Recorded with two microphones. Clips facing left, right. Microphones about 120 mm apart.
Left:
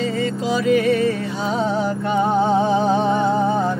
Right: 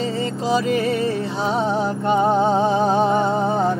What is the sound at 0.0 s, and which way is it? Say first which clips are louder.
Music: left 1 dB; 35° right (ahead or behind).